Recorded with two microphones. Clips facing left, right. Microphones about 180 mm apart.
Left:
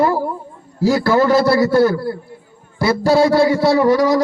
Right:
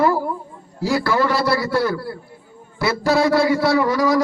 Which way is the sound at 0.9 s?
45° left (ahead or behind).